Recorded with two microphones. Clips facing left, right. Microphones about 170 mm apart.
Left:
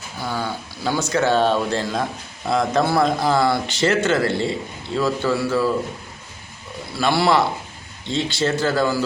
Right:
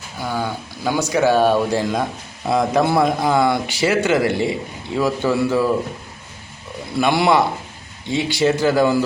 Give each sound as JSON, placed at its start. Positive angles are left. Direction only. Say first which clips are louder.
{"t": 0.3, "sound": "speech", "louder": "right 2 dB", "side_deg": -15}
{"t": 6.9, "sound": "speech", "louder": "right 2 dB", "side_deg": -15}